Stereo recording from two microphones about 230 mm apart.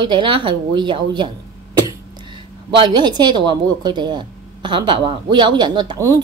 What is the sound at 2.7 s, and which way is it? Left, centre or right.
A woman's voice, centre.